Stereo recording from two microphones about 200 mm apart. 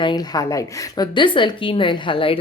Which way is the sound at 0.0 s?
20° left (ahead or behind).